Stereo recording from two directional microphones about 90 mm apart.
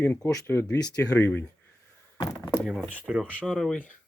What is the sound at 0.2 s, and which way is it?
Speech, 30° left (ahead or behind).